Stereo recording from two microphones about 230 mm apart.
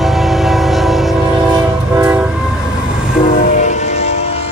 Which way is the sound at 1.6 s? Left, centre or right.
Centre.